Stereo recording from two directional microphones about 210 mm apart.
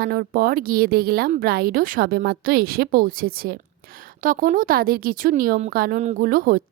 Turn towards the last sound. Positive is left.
turn(degrees=-40)  # may be behind; listen again after turning